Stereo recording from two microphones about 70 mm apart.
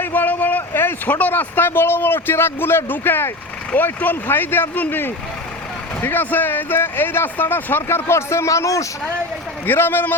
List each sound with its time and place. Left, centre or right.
0.0 s speech: left
9.6 s speech: left